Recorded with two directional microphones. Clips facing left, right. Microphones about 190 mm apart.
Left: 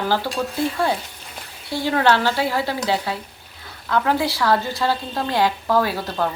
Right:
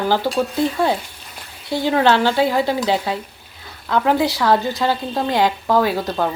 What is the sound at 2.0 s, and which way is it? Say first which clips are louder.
Speech: right 3 dB; 20° right (ahead or behind).